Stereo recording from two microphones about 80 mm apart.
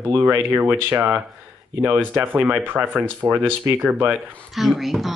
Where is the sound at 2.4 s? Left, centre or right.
Centre.